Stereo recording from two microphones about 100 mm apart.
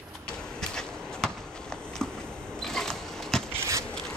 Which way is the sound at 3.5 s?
25° right (ahead or behind).